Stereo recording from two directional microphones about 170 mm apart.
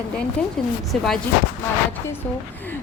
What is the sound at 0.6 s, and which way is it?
Speech, 5° left (ahead or behind).